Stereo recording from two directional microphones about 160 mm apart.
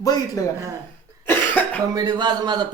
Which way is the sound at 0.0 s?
20° left (ahead or behind).